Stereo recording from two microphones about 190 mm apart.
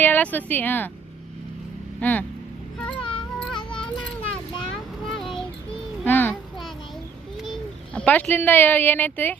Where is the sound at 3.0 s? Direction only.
25° left (ahead or behind).